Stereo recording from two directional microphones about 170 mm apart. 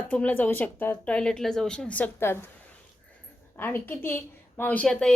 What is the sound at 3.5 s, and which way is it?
A woman's voice, 15° left (ahead or behind).